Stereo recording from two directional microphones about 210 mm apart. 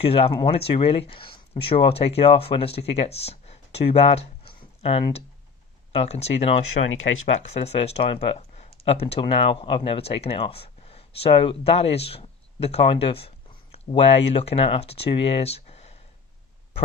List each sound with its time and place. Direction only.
0.0 s speech: 25° left (ahead or behind)
6.8 s speech: 45° left (ahead or behind)
7.6 s speech: 30° left (ahead or behind)